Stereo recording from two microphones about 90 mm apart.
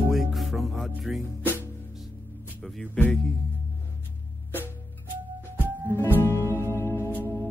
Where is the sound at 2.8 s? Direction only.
15° left (ahead or behind).